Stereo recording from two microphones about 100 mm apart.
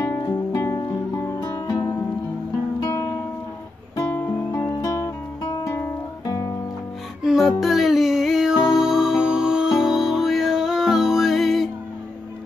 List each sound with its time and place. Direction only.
0.2 s music: 45° left (ahead or behind)
4.5 s music: 40° left (ahead or behind)
7.2 s music: centre (ahead or behind)